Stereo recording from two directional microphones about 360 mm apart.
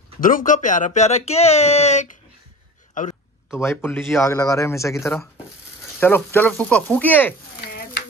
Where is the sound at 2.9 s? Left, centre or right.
Left.